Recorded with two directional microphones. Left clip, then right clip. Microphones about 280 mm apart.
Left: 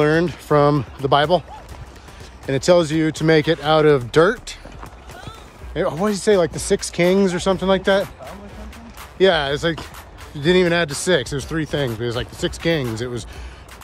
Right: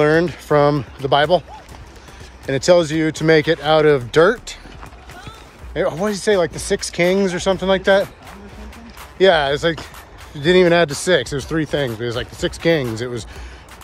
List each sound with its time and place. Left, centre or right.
0.0 s speech: centre
2.4 s speech: centre
5.8 s speech: centre
9.2 s speech: centre